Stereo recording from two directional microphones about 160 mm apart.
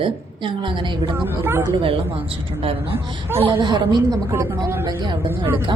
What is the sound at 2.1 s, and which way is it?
A woman's voice, 35° right (ahead or behind).